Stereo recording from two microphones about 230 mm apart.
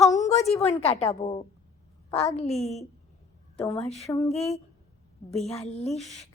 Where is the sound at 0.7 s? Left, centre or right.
Left.